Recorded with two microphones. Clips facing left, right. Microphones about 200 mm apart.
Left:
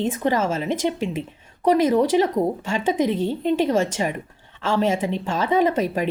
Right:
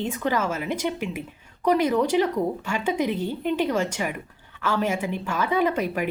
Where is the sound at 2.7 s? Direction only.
25° left (ahead or behind).